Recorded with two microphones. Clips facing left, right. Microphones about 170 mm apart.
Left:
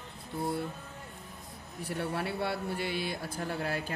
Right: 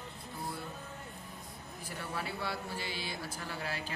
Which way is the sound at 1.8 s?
65° left (ahead or behind).